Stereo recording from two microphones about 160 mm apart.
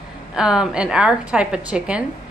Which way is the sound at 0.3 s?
5° right (ahead or behind).